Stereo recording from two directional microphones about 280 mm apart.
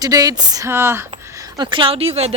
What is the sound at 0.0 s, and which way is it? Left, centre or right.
Speech, centre.